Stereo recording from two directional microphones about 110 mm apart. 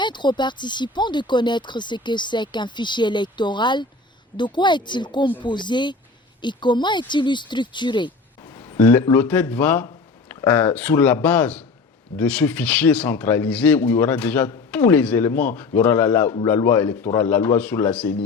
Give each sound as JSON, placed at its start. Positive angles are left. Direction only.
{"t": 0.0, "sound": "speech", "side_deg": 45}
{"t": 8.5, "sound": "a sound", "side_deg": 25}
{"t": 9.1, "sound": "speech", "side_deg": 15}